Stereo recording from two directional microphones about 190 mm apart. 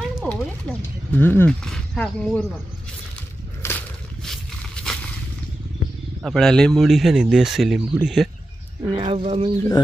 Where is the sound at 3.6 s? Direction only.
10° left (ahead or behind).